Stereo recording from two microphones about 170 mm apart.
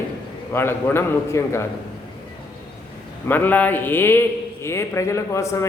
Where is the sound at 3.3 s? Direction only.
10° left (ahead or behind).